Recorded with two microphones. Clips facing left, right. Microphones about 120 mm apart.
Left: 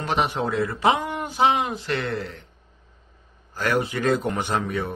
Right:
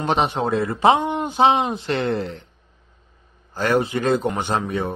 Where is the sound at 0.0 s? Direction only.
25° right (ahead or behind).